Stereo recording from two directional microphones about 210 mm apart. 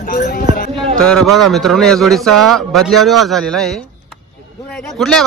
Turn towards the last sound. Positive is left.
turn(degrees=0)  # may be behind; listen again after turning